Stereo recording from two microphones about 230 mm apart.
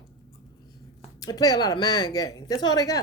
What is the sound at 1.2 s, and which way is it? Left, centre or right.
A woman's voice, centre.